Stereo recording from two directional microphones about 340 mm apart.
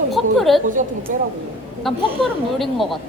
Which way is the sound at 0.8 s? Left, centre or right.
Right.